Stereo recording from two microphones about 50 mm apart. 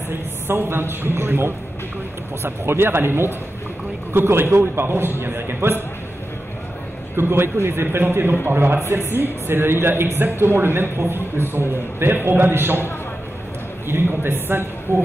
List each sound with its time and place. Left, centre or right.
0.5 s speech: right
7.2 s speech: right
13.8 s speech: right
14.9 s music: left